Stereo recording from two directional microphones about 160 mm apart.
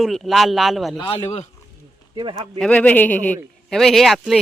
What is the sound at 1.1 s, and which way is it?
Speech, 40° left (ahead or behind).